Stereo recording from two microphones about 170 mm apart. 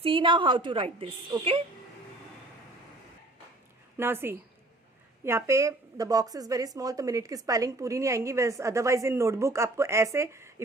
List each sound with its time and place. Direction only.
0.0 s a woman's voice: 30° right (ahead or behind)
3.9 s a woman's voice: 15° right (ahead or behind)